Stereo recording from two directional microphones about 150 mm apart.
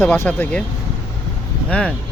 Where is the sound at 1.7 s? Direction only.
10° left (ahead or behind).